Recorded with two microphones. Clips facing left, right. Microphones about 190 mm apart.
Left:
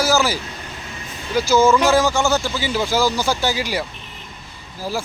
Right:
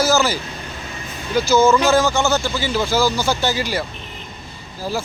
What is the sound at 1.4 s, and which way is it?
Speech, 10° left (ahead or behind).